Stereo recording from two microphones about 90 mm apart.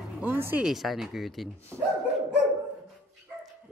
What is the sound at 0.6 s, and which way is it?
Speech, centre (ahead or behind).